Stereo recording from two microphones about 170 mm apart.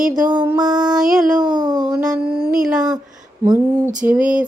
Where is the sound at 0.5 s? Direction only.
25° right (ahead or behind).